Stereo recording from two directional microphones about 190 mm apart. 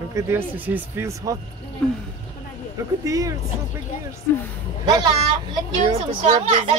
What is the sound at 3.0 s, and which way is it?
Speech, 20° right (ahead or behind).